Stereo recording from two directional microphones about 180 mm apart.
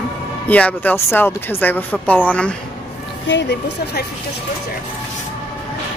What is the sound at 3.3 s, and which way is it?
Speech, 70° left (ahead or behind).